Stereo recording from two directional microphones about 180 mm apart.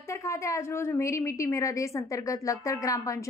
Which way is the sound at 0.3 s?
15° left (ahead or behind).